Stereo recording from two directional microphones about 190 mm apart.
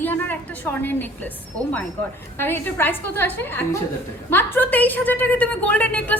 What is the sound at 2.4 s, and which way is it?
A woman's voice, 10° left (ahead or behind).